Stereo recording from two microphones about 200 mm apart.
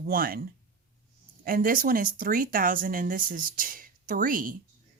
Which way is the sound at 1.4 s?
45° right (ahead or behind).